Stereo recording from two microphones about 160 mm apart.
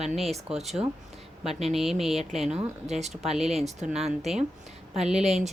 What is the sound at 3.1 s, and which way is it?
A woman's voice, centre (ahead or behind).